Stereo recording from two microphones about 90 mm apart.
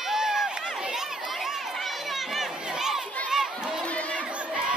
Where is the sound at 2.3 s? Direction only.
5° right (ahead or behind).